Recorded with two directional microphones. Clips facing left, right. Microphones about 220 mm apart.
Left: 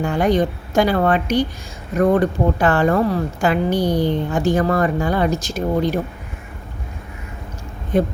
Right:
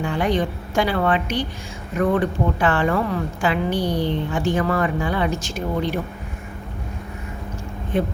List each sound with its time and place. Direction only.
0.0 s a woman's voice: 45° left (ahead or behind)
7.9 s a woman's voice: 40° left (ahead or behind)